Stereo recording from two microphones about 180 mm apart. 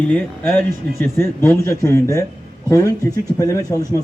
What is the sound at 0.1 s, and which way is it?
A man's voice, 10° left (ahead or behind).